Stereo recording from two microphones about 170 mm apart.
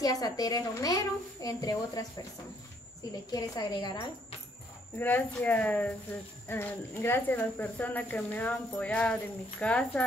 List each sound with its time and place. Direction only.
0.0 s a woman's voice: 20° left (ahead or behind)
3.3 s a woman's voice: 25° left (ahead or behind)
4.9 s speech: 10° left (ahead or behind)